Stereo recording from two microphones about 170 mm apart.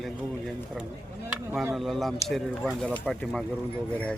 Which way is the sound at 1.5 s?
15° right (ahead or behind).